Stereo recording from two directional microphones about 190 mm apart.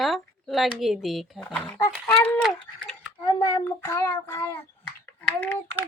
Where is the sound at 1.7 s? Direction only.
15° left (ahead or behind).